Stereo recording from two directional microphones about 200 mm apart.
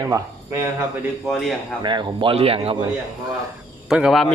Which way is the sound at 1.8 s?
20° right (ahead or behind).